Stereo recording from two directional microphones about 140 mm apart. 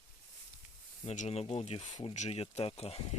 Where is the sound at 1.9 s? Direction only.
40° left (ahead or behind).